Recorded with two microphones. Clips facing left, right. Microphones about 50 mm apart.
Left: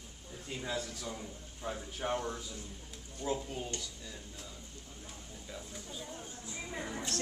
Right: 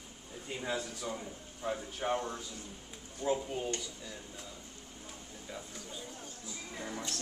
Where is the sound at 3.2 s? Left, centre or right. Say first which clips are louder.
Right 4 dB; centre.